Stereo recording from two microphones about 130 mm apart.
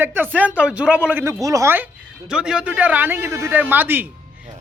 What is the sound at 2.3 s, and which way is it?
Speech, 5° right (ahead or behind).